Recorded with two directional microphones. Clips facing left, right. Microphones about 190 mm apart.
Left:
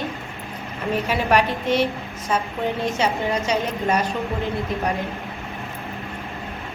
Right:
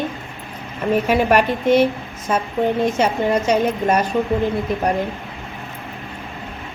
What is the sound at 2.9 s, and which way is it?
A woman's voice, 50° right (ahead or behind).